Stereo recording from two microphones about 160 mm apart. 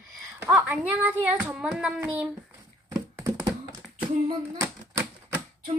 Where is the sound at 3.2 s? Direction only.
20° right (ahead or behind).